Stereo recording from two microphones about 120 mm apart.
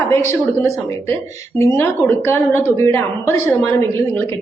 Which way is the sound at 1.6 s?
25° left (ahead or behind).